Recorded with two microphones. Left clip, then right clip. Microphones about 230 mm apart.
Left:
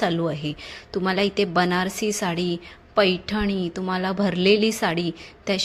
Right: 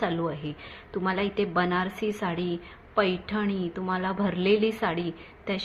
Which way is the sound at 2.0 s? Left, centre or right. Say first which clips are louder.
Left 4 dB; left.